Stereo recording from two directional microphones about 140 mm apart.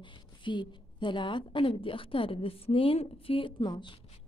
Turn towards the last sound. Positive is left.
turn(degrees=35)  # may be behind; listen again after turning